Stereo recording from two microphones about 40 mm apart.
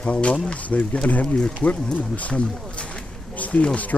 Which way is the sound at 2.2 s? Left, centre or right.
Left.